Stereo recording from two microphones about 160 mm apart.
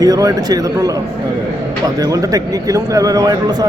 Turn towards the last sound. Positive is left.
turn(degrees=-25)  # may be behind; listen again after turning